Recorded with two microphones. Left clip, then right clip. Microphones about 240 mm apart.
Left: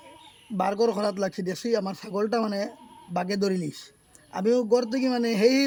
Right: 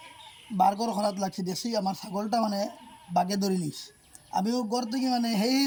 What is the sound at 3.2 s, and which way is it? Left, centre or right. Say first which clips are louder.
Speech: left 4 dB; centre.